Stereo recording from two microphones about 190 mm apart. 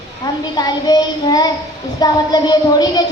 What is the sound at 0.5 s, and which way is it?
A woman's voice, 20° left (ahead or behind).